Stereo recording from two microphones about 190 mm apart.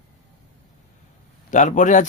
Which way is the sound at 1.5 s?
40° left (ahead or behind).